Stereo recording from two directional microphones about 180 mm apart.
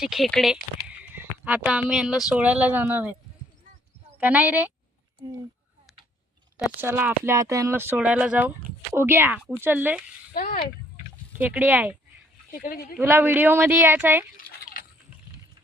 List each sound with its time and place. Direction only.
0.0 s speech: centre (ahead or behind)
4.2 s speech: 10° right (ahead or behind)
6.6 s speech: 10° right (ahead or behind)
10.3 s speech: 55° left (ahead or behind)
11.3 s speech: 10° right (ahead or behind)
12.5 s speech: 55° left (ahead or behind)
13.0 s speech: 10° right (ahead or behind)
14.4 s a sound: 55° left (ahead or behind)